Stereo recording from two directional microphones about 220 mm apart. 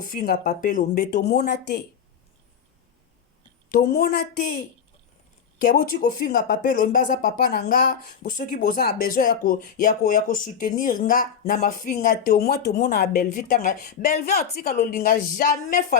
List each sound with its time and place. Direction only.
0.0 s speech: 40° left (ahead or behind)
3.7 s a woman's voice: 45° left (ahead or behind)
5.6 s speech: 40° left (ahead or behind)